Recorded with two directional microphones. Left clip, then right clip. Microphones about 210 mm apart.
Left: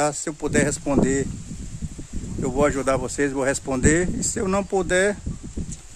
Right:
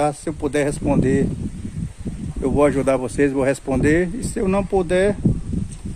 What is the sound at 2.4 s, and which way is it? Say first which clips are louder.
Speech: right 4 dB; centre (ahead or behind).